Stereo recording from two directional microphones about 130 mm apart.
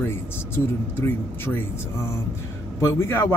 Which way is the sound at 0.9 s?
15° left (ahead or behind).